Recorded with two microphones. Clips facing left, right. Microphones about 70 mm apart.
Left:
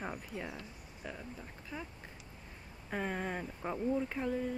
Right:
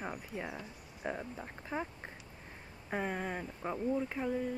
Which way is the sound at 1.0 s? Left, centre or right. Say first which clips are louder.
Right 6 dB; right.